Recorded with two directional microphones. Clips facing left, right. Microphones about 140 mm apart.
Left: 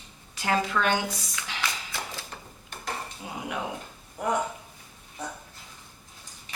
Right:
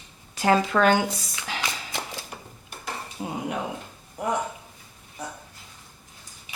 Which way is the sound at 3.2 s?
45° right (ahead or behind).